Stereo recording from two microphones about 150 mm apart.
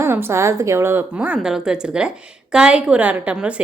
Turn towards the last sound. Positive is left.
turn(degrees=-10)  # may be behind; listen again after turning